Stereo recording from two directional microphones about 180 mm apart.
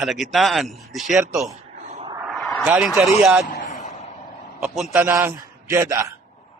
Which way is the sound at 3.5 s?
45° left (ahead or behind).